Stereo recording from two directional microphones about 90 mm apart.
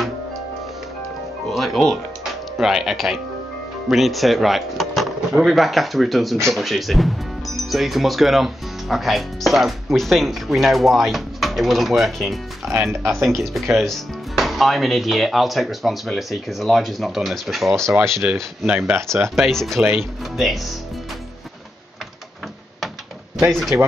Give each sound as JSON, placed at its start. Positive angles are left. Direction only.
{"t": 1.5, "sound": "speech", "side_deg": 0}
{"t": 13.0, "sound": "speech", "side_deg": -30}
{"t": 13.4, "sound": "speech", "side_deg": 0}
{"t": 18.8, "sound": "speech", "side_deg": -25}
{"t": 19.3, "sound": "speech", "side_deg": 0}
{"t": 23.5, "sound": "speech", "side_deg": 0}